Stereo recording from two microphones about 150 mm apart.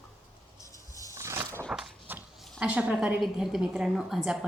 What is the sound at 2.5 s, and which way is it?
A woman's voice, 10° right (ahead or behind).